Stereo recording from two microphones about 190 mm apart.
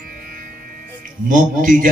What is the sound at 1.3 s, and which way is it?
Speech, 45° right (ahead or behind).